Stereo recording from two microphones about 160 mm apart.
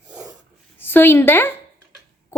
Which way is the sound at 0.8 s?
15° left (ahead or behind).